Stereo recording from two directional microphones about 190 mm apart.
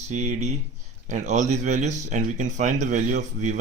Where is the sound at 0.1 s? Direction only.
35° right (ahead or behind).